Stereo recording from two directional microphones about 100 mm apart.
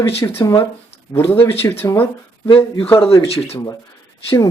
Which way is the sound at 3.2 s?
75° left (ahead or behind).